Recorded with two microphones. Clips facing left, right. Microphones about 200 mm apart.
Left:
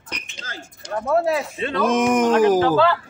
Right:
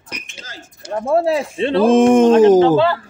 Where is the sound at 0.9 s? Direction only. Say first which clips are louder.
Right 3 dB; 30° right (ahead or behind).